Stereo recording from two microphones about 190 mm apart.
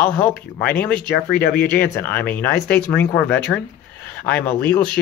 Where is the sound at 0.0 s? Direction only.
10° left (ahead or behind).